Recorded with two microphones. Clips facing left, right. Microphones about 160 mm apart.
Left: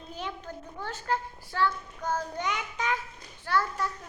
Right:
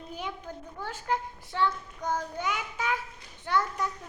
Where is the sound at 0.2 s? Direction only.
10° right (ahead or behind).